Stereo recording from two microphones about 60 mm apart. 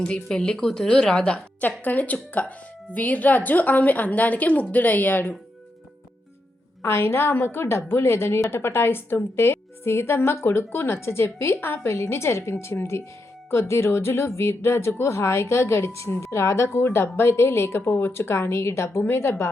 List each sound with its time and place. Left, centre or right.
0.0 s a woman's voice: centre
1.8 s speech: left
6.8 s speech: left